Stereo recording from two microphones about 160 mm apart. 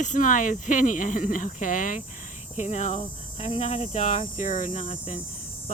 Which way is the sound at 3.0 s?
35° left (ahead or behind).